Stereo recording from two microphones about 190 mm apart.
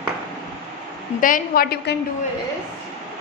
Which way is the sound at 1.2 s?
45° left (ahead or behind).